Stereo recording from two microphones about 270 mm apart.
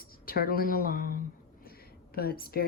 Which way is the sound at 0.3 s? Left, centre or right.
Left.